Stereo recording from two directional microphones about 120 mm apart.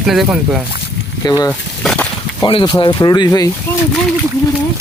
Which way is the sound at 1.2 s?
35° left (ahead or behind).